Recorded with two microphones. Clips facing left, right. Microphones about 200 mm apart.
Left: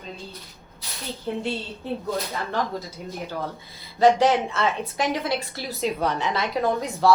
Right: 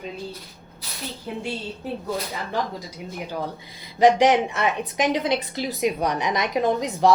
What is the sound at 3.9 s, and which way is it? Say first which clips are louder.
A woman's voice: right 1 dB; 15° right (ahead or behind).